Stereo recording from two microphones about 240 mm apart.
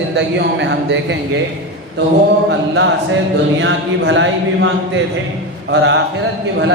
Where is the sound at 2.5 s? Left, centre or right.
Right.